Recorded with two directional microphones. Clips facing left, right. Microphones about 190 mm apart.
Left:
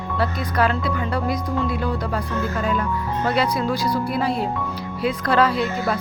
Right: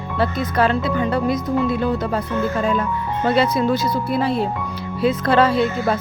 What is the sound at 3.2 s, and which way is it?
Speech, 25° right (ahead or behind).